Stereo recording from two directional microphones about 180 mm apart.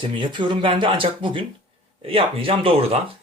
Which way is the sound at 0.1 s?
25° right (ahead or behind).